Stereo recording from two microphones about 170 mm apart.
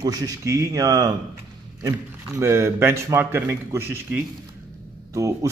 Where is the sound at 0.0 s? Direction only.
20° right (ahead or behind).